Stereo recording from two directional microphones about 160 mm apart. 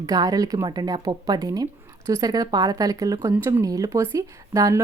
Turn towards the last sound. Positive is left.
turn(degrees=-20)  # may be behind; listen again after turning